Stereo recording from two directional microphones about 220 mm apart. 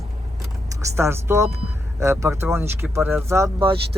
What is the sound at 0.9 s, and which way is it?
Speech, 10° right (ahead or behind).